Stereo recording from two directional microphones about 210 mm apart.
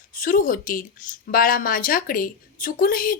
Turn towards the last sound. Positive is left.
turn(degrees=40)  # may be behind; listen again after turning